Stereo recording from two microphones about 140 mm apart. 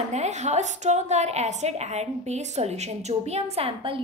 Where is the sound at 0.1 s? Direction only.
55° right (ahead or behind).